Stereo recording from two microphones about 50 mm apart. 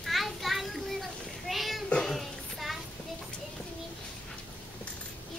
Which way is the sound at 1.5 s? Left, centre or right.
Centre.